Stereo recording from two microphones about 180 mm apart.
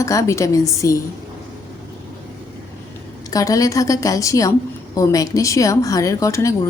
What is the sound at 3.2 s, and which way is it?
A woman's voice, 20° left (ahead or behind).